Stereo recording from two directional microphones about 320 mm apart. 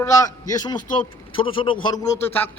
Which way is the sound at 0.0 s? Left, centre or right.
Centre.